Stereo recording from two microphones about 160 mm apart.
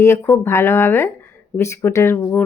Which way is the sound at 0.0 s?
15° left (ahead or behind).